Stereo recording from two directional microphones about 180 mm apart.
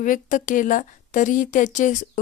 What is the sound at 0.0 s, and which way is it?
Speech, 45° left (ahead or behind).